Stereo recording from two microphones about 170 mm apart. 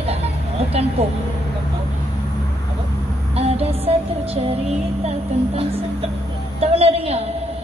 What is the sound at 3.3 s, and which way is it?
Music, 35° right (ahead or behind).